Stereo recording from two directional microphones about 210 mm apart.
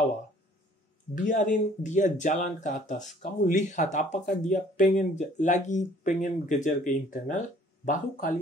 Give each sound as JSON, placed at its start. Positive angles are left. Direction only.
{"t": 1.1, "sound": "speech", "side_deg": 40}